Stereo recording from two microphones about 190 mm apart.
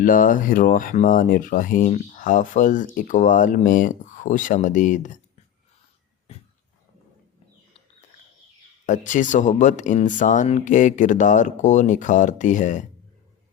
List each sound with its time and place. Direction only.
0.0 s speech: 45° left (ahead or behind)
8.9 s speech: 40° left (ahead or behind)